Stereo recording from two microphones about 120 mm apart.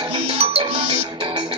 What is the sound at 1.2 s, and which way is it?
Music, 35° right (ahead or behind).